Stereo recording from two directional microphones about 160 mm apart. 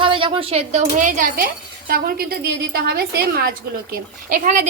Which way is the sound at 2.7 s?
80° right.